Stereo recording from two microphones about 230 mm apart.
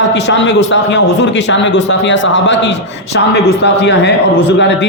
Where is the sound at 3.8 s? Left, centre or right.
Left.